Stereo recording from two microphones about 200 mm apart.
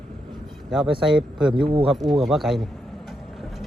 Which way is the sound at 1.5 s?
25° right (ahead or behind).